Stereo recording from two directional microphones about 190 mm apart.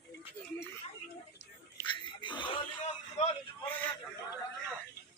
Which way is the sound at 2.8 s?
35° left (ahead or behind).